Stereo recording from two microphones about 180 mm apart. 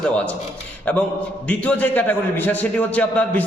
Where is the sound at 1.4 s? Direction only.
10° left (ahead or behind).